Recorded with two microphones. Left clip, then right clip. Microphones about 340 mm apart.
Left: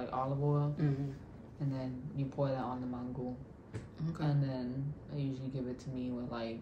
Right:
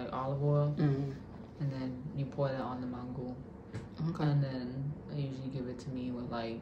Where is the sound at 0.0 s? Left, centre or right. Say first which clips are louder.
Even; centre.